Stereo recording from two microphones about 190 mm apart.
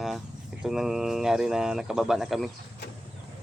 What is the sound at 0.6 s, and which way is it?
Speech, centre (ahead or behind).